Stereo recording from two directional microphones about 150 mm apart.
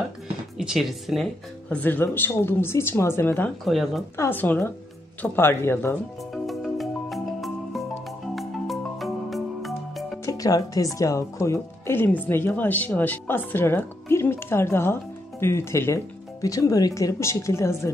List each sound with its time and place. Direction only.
0.6 s speech: centre (ahead or behind); by 3.5 s 15° left (ahead or behind)
3.6 s speech: centre (ahead or behind)
4.2 s speech: 10° left (ahead or behind)
6.3 s music: centre (ahead or behind)
8.4 s music: centre (ahead or behind)
10.2 s speech: 25° left (ahead or behind)